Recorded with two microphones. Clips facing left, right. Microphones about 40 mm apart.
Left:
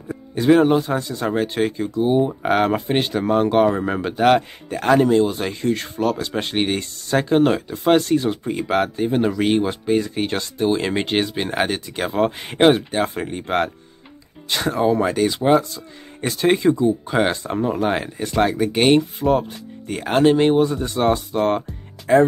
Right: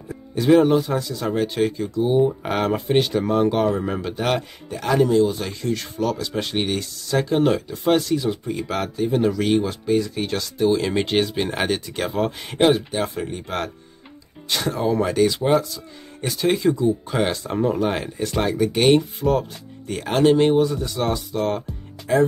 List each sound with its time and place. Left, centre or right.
0.5 s speech: left
4.6 s speech: left
8.0 s speech: left
14.5 s speech: centre
17.6 s speech: centre
20.8 s speech: left